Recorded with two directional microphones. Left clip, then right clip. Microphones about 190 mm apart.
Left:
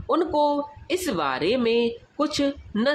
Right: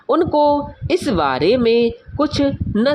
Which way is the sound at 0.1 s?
30° right (ahead or behind).